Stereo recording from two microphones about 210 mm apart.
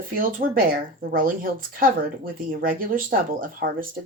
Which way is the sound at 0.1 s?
40° right (ahead or behind).